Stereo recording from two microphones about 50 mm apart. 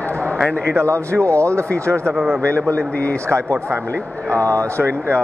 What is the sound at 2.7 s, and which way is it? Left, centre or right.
Speech, left.